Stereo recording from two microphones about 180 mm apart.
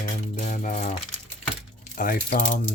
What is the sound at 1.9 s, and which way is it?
Speech, 50° left (ahead or behind).